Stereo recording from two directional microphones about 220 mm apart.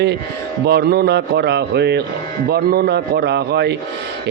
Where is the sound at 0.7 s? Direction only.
45° right (ahead or behind).